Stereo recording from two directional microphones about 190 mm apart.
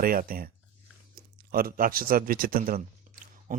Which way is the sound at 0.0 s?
50° right (ahead or behind).